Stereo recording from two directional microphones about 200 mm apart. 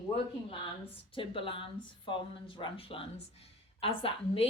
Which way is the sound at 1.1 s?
25° left (ahead or behind).